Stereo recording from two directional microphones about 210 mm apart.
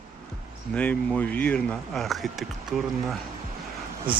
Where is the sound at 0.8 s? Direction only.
5° left (ahead or behind).